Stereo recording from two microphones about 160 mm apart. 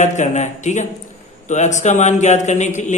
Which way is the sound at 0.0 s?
50° left (ahead or behind).